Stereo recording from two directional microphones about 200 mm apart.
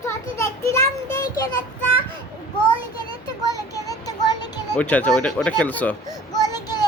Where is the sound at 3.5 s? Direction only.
15° left (ahead or behind).